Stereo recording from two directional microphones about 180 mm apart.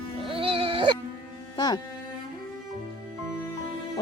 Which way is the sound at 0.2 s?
30° right (ahead or behind).